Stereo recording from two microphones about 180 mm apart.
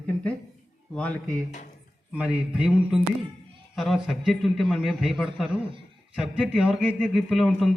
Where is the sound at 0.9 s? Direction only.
5° left (ahead or behind).